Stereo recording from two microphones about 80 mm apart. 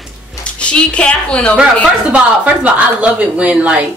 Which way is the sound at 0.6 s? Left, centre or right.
Centre.